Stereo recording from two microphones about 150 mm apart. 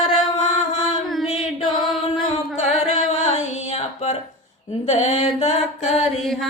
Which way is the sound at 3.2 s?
50° left (ahead or behind).